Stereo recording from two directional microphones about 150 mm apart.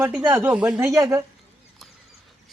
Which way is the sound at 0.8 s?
20° right (ahead or behind).